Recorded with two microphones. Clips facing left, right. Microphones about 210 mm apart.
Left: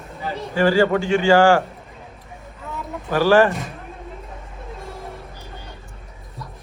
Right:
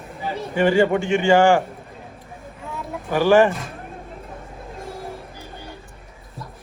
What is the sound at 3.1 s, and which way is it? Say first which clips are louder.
Speech: even; 15° right (ahead or behind).